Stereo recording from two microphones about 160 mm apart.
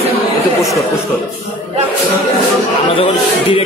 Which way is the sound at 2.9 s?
35° left (ahead or behind).